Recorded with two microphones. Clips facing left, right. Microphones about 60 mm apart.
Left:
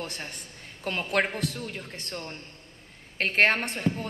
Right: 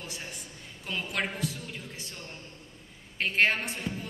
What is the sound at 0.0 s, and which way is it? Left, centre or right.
A man's voice, left.